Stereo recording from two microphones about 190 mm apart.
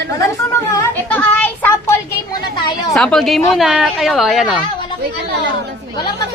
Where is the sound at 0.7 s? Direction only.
10° left (ahead or behind).